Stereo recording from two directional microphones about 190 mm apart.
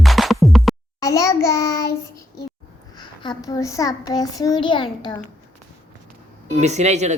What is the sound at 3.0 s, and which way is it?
A child's voice, 20° left (ahead or behind).